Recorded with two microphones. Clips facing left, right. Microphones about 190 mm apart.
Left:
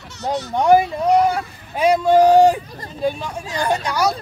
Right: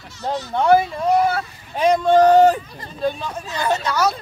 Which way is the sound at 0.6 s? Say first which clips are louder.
Left 1 dB; 15° left (ahead or behind).